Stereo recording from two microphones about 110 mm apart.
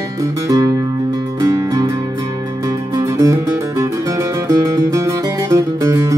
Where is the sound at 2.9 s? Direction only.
30° right (ahead or behind).